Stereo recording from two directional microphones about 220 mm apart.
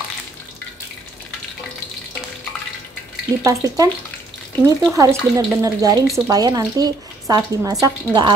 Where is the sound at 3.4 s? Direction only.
15° right (ahead or behind).